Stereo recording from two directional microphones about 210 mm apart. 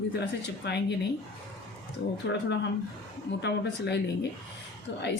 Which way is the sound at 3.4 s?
55° left (ahead or behind).